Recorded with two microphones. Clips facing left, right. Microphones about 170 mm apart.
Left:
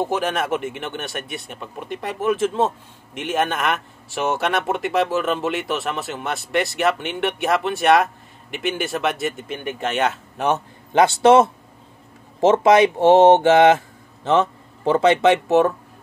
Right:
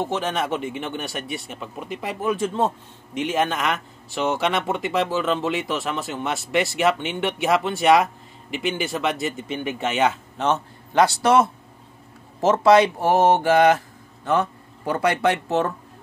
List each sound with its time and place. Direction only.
0.0 s speech: 10° left (ahead or behind)
10.3 s a man's voice: 15° left (ahead or behind)